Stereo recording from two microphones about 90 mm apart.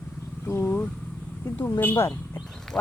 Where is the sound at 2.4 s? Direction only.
5° left (ahead or behind).